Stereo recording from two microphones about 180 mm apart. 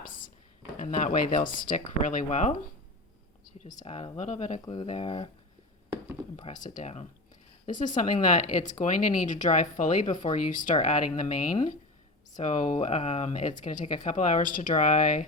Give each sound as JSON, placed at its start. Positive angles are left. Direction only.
{"t": 0.8, "sound": "speech", "side_deg": 45}
{"t": 3.6, "sound": "speech", "side_deg": 45}
{"t": 4.6, "sound": "speech", "side_deg": 25}
{"t": 6.3, "sound": "speech", "side_deg": 45}